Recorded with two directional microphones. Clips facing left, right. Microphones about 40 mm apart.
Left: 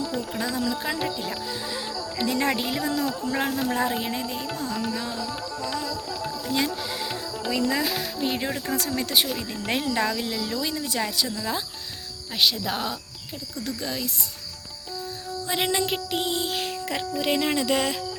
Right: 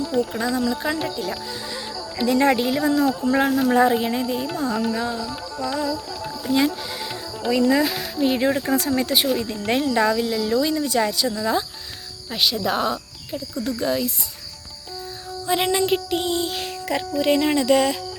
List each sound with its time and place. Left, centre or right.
0.0 s music: centre
1.3 s speech: centre
3.2 s music: centre
6.4 s speech: centre
8.9 s music: centre
9.3 s music: centre
12.3 s music: centre
15.4 s music: centre